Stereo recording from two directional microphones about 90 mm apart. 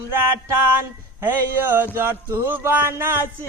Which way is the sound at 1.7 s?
25° right (ahead or behind).